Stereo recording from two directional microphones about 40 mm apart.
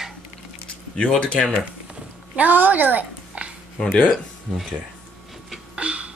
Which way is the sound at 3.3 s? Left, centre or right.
Right.